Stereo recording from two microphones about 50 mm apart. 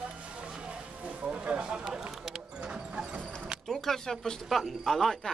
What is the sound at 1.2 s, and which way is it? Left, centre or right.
Speech, centre.